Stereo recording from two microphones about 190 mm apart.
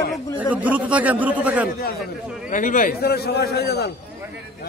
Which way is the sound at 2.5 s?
45° left (ahead or behind).